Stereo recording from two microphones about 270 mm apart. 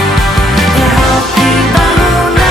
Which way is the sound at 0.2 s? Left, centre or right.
Centre.